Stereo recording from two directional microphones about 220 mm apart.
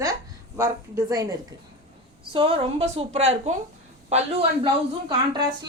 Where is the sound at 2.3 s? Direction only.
25° right (ahead or behind).